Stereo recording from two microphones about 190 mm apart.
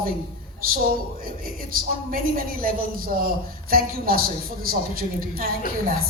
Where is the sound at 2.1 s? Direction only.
50° right (ahead or behind).